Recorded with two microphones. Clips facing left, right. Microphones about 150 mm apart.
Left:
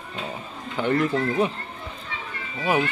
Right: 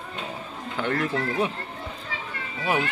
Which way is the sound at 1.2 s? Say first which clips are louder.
Left 3 dB; centre (ahead or behind).